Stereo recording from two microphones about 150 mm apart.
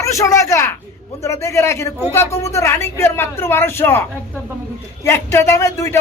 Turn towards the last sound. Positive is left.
turn(degrees=20)  # may be behind; listen again after turning